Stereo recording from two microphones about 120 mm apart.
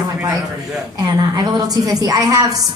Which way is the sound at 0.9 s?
30° right (ahead or behind).